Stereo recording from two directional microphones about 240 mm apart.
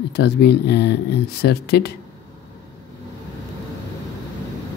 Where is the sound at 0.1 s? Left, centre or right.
Left.